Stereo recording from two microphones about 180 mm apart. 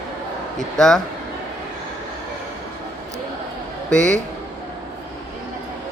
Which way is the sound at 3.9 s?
5° left (ahead or behind).